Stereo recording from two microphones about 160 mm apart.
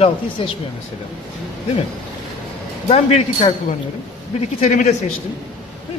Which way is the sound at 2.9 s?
40° left (ahead or behind).